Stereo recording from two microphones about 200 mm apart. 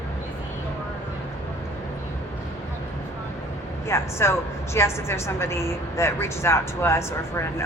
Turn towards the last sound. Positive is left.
turn(degrees=15)  # may be behind; listen again after turning